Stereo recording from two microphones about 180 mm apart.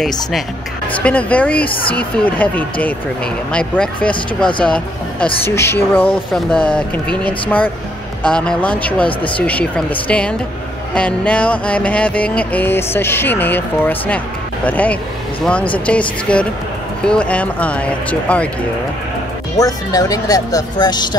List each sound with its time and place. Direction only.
1.0 s music: 10° left (ahead or behind)
3.5 s speech: 5° left (ahead or behind)
4.6 s music: 5° left (ahead or behind)
19.5 s speech: 20° left (ahead or behind)